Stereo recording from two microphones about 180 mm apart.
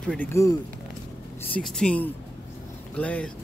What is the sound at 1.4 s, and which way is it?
Speech, 5° left (ahead or behind).